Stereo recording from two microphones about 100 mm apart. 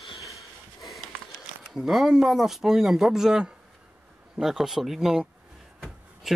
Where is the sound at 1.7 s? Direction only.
Centre (ahead or behind).